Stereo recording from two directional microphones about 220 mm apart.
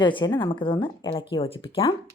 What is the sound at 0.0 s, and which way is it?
A woman's voice, 20° left (ahead or behind).